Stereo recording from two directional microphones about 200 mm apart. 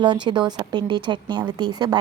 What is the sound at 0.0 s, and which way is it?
A woman's voice, 20° right (ahead or behind).